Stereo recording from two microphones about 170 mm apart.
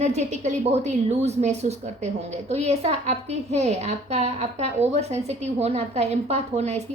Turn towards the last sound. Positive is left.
turn(degrees=-40)  # may be behind; listen again after turning